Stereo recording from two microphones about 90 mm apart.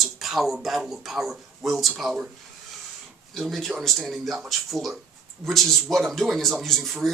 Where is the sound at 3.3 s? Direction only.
Centre (ahead or behind).